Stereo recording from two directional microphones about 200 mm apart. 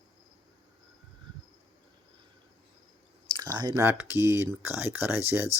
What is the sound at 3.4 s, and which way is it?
Speech, 20° right (ahead or behind).